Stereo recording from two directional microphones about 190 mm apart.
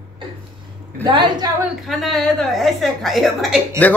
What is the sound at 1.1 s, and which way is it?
Speech, 25° right (ahead or behind).